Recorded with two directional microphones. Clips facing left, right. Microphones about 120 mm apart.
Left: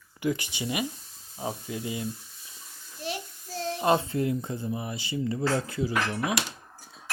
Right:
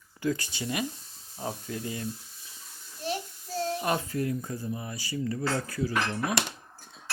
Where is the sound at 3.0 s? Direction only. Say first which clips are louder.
Right 2 dB; 40° right (ahead or behind).